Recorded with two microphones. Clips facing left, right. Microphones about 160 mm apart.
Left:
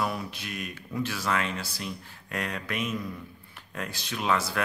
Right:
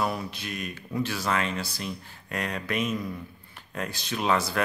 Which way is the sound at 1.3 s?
5° left (ahead or behind).